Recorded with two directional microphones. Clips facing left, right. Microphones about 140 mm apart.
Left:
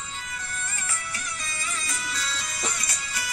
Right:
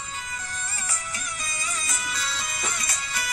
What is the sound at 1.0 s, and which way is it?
Music, 15° right (ahead or behind).